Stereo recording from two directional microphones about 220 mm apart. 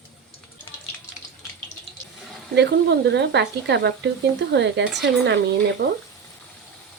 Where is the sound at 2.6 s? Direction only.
50° right (ahead or behind).